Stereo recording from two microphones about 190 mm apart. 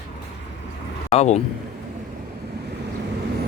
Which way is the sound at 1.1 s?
35° left (ahead or behind).